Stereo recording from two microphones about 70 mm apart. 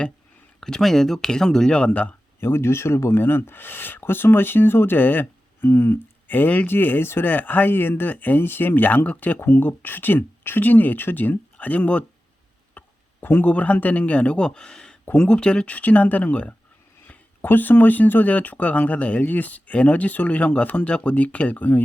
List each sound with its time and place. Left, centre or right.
0.6 s speech: centre
2.4 s speech: left; by 12.0 s centre
12.8 s a sound: left
13.2 s speech: left